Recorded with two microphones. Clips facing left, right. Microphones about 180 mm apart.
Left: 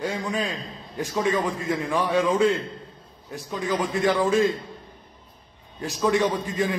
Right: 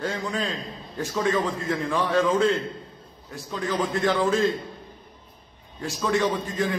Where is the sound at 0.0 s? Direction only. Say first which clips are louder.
Left 1 dB; 15° left (ahead or behind).